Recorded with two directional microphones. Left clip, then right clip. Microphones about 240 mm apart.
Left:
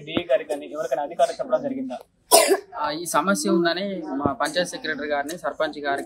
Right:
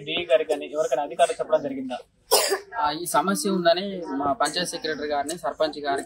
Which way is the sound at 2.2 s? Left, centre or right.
Left.